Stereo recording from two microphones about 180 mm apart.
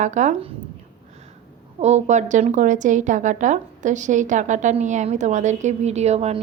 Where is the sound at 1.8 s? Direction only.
40° right (ahead or behind).